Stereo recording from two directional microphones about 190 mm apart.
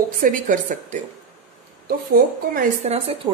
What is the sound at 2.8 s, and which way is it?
Speech, 30° right (ahead or behind).